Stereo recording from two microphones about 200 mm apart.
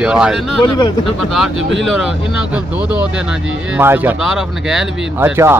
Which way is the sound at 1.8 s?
Centre (ahead or behind).